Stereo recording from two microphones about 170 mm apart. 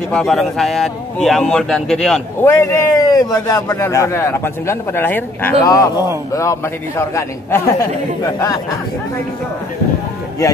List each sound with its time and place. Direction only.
0.1 s speech: centre (ahead or behind)
2.4 s a man's voice: 15° left (ahead or behind)